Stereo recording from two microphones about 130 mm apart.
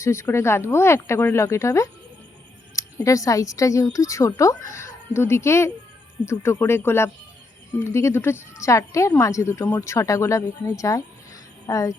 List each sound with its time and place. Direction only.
0.0 s speech: 20° left (ahead or behind)